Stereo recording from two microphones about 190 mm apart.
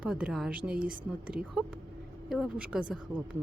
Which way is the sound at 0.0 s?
5° right (ahead or behind).